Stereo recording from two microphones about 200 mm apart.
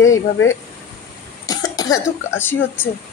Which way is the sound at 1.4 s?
20° left (ahead or behind).